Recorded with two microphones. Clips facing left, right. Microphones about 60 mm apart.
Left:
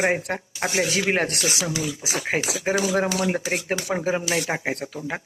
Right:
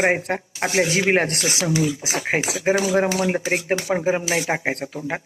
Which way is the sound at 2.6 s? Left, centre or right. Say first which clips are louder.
Right 4 dB; centre.